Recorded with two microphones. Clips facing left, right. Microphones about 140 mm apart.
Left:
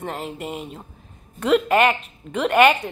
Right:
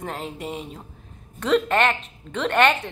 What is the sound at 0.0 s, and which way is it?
A woman's voice, centre (ahead or behind).